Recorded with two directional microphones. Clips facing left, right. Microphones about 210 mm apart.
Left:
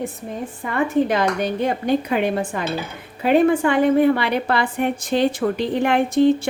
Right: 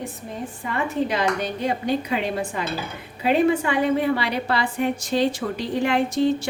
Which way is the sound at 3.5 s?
50° left (ahead or behind).